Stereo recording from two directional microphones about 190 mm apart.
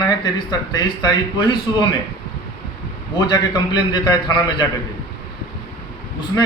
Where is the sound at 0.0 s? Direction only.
20° left (ahead or behind).